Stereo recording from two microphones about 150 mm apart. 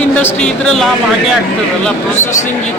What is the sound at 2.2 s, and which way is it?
Speech, 55° left (ahead or behind).